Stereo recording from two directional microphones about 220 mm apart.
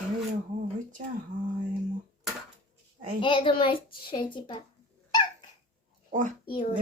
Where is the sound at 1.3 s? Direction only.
55° right (ahead or behind).